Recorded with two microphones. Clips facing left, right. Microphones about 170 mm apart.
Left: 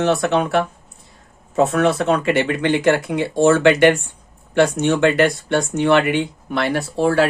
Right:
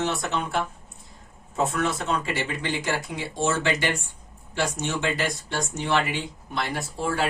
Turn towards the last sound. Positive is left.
turn(degrees=80)